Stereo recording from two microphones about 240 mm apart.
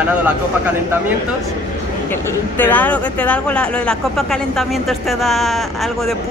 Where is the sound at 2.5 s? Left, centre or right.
Centre.